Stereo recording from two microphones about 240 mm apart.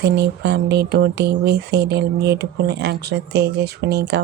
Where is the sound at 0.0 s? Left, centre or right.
Right.